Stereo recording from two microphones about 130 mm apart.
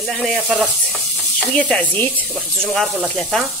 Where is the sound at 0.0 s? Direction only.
5° left (ahead or behind).